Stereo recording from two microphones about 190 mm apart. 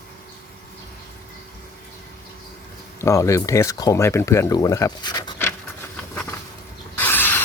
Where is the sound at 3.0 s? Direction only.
15° left (ahead or behind).